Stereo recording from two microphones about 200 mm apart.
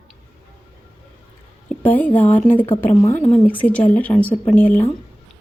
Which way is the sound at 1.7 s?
10° left (ahead or behind).